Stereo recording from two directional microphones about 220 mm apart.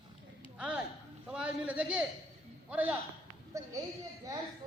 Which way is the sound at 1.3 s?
5° right (ahead or behind).